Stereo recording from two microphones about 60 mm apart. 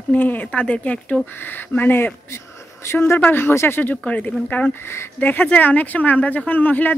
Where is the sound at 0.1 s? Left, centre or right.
Left.